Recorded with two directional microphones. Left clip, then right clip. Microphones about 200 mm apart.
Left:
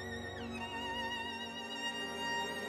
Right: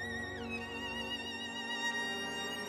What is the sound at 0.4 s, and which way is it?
Music, centre (ahead or behind).